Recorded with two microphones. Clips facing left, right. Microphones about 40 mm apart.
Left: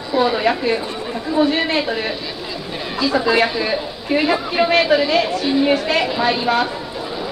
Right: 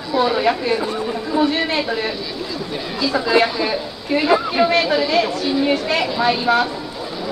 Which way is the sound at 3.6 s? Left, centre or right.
Centre.